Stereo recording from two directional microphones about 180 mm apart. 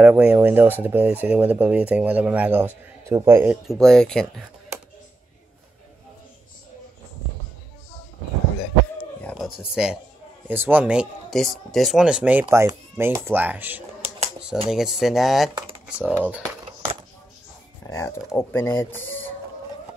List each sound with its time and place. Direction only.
0.0 s speech: 5° right (ahead or behind)
3.6 s speech: centre (ahead or behind)
9.6 s speech: 5° right (ahead or behind)
17.8 s speech: 15° left (ahead or behind)